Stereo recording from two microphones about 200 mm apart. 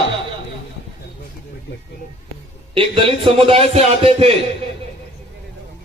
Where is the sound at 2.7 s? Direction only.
30° right (ahead or behind).